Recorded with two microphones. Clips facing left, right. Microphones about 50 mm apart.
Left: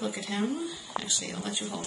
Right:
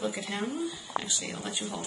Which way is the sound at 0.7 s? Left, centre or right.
Right.